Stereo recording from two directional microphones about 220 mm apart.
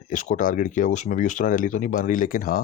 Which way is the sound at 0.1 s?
35° left (ahead or behind).